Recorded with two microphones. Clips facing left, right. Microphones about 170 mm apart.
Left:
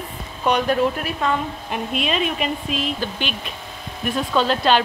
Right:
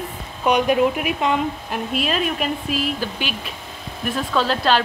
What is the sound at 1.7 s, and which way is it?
A woman's voice, centre (ahead or behind).